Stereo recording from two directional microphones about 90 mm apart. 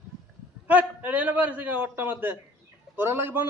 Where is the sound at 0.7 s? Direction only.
20° right (ahead or behind).